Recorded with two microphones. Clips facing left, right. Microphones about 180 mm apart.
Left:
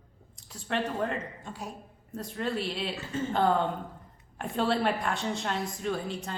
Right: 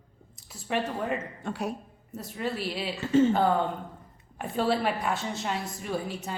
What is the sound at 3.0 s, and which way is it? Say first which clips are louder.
Speech: right 16 dB; 75° right (ahead or behind).